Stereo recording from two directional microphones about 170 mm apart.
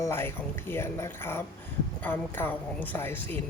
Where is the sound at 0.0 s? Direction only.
15° left (ahead or behind).